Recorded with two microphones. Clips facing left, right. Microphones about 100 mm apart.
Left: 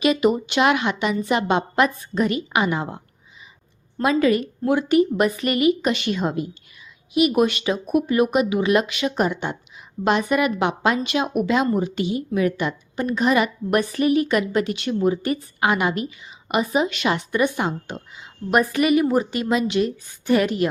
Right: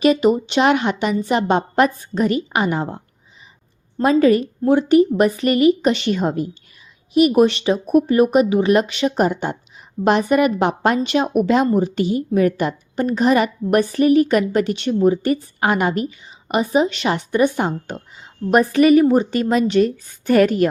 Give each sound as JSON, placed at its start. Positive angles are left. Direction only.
{"t": 0.0, "sound": "a woman's voice", "side_deg": -35}
{"t": 4.0, "sound": "a woman's voice", "side_deg": -40}